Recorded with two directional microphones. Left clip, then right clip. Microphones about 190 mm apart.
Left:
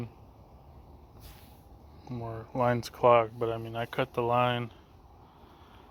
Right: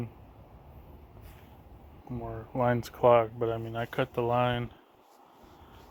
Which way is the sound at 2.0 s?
5° right (ahead or behind).